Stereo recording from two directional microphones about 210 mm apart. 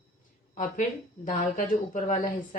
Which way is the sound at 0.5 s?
40° left (ahead or behind).